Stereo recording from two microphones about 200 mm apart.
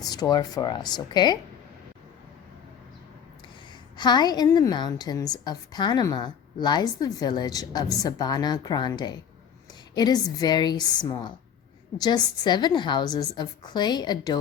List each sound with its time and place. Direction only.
0.0 s a woman's voice: 20° left (ahead or behind)
3.9 s a woman's voice: 20° left (ahead or behind)